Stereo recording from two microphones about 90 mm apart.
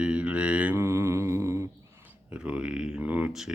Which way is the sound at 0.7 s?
30° right (ahead or behind).